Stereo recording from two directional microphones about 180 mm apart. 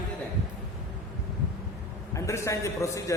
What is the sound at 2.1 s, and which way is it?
Speech, 15° left (ahead or behind).